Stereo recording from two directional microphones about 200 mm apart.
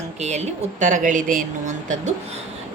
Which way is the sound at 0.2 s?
35° right (ahead or behind).